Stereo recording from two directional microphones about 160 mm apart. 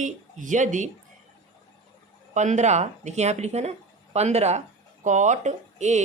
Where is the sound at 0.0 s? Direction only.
50° right (ahead or behind).